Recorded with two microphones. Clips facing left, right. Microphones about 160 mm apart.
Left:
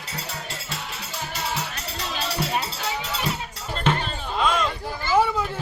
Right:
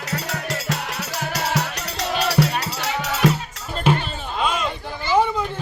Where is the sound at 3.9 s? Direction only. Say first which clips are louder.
Right 4 dB; 10° right (ahead or behind).